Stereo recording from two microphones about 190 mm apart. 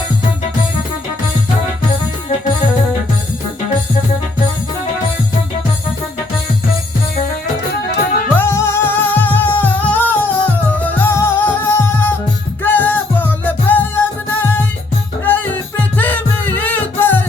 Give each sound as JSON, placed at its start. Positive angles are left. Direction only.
{"t": 8.4, "sound": "music", "side_deg": 15}